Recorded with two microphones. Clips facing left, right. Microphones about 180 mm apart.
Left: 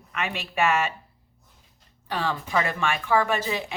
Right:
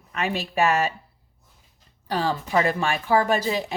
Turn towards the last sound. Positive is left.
turn(degrees=-35)  # may be behind; listen again after turning